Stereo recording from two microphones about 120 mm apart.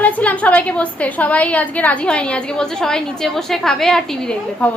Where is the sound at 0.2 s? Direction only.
10° left (ahead or behind).